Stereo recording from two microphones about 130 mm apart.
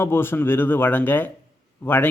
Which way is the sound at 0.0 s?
20° left (ahead or behind).